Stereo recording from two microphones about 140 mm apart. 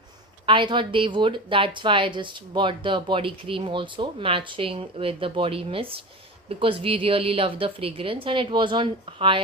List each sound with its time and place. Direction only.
0.4 s a woman's voice: 35° right (ahead or behind)